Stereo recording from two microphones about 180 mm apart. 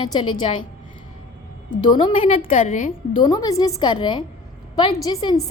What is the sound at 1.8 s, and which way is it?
A woman's voice, 25° left (ahead or behind).